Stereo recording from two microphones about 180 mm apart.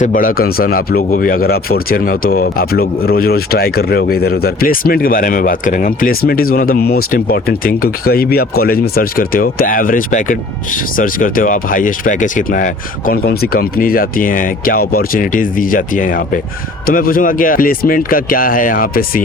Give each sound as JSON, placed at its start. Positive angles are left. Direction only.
{"t": 0.0, "sound": "speech", "side_deg": 50}